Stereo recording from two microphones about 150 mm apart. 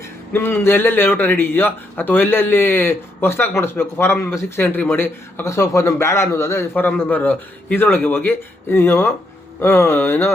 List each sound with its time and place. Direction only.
0.3 s a man's voice: 15° left (ahead or behind)